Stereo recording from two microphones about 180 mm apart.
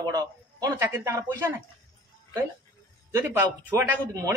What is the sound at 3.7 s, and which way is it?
Speech, 15° right (ahead or behind).